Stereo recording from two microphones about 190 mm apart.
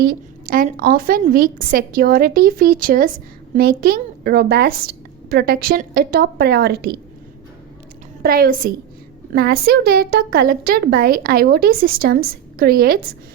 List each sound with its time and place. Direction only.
0.0 s a woman's voice: 50° right (ahead or behind)
8.2 s a woman's voice: 50° right (ahead or behind)